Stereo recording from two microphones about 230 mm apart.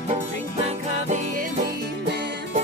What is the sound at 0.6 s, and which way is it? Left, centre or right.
Music, right.